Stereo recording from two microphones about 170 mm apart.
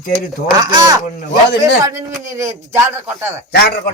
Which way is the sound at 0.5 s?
25° right (ahead or behind).